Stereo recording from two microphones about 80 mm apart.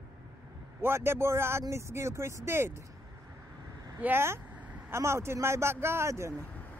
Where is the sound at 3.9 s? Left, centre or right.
Right.